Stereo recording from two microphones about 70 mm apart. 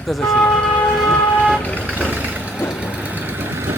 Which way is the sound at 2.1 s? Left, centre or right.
Right.